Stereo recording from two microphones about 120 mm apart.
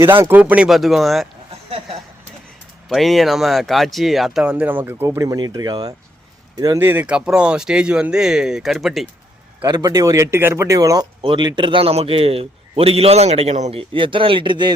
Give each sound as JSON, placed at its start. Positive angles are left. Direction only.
{"t": 0.0, "sound": "speech", "side_deg": -20}
{"t": 2.9, "sound": "speech", "side_deg": 0}
{"t": 6.7, "sound": "speech", "side_deg": -15}
{"t": 9.6, "sound": "speech", "side_deg": -30}
{"t": 11.2, "sound": "a man's voice", "side_deg": -40}